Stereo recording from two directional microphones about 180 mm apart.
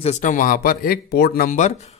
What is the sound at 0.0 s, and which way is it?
Speech, 40° left (ahead or behind).